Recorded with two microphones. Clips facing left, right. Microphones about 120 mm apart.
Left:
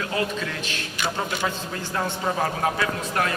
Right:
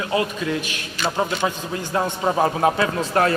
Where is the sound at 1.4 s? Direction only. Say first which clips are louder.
Right 4 dB; 15° right (ahead or behind).